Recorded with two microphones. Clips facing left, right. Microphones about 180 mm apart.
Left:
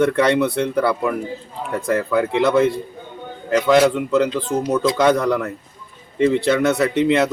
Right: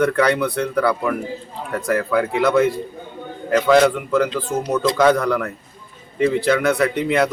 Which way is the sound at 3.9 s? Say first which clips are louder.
Left 1 dB; 20° left (ahead or behind).